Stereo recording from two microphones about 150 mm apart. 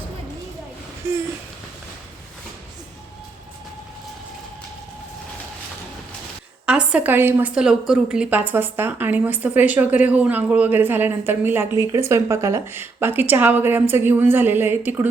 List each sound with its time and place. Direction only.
1.0 s a woman's voice: 15° right (ahead or behind)
6.7 s a woman's voice: 5° right (ahead or behind)
7.5 s a woman's voice: 5° right (ahead or behind)